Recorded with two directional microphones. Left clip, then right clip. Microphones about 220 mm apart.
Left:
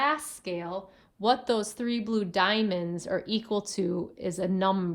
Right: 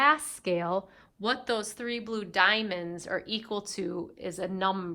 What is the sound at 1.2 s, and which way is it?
Speech, 10° left (ahead or behind).